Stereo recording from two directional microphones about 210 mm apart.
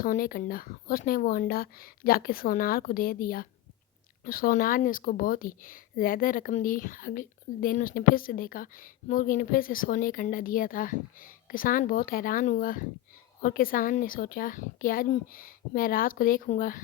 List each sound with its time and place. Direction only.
0.0 s speech: 45° left (ahead or behind)